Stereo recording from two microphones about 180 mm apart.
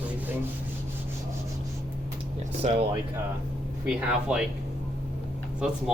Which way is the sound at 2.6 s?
40° right (ahead or behind).